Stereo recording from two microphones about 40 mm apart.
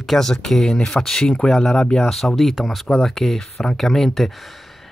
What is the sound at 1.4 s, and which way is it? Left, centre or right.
Speech, centre.